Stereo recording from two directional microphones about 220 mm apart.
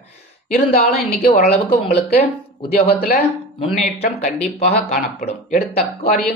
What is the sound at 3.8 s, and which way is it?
Speech, 30° left (ahead or behind).